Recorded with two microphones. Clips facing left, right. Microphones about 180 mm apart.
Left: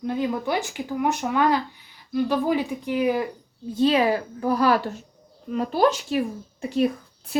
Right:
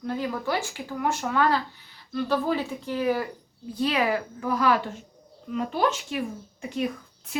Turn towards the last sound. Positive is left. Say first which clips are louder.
# left 6 dB
turn(degrees=35)  # may be behind; listen again after turning